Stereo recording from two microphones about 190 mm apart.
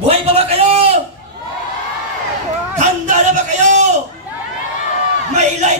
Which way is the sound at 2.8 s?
40° right (ahead or behind).